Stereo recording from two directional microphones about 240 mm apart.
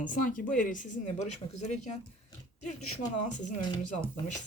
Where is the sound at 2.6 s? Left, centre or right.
Left.